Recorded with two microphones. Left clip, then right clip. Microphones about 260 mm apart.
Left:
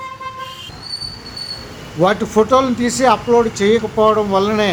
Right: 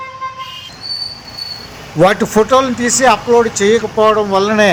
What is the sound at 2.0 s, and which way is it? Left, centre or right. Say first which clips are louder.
Speech: right 4 dB; centre.